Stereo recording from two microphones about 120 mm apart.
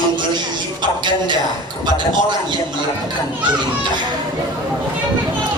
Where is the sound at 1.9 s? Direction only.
35° right (ahead or behind).